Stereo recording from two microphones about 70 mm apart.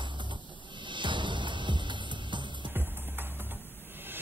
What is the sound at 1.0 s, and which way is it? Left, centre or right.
Music, right.